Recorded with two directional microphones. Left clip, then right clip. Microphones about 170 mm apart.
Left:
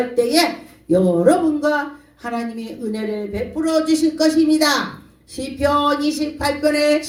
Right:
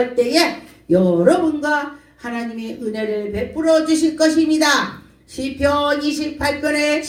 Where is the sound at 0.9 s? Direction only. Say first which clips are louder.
Right 1 dB; 40° left (ahead or behind).